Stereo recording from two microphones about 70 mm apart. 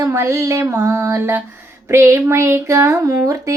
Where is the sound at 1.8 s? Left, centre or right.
Right.